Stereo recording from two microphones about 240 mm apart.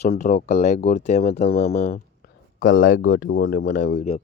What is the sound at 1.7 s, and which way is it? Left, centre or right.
Speech, left.